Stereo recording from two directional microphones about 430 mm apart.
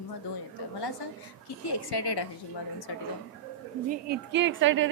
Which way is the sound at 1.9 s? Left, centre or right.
Left.